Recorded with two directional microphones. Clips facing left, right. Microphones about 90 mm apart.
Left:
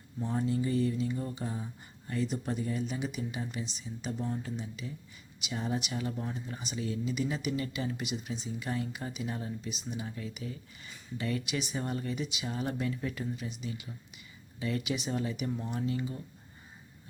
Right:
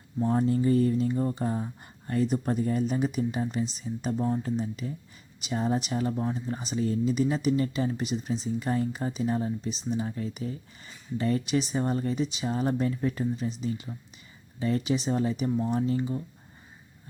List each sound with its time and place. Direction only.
0.2 s speech: 45° right (ahead or behind); by 16.2 s 30° right (ahead or behind)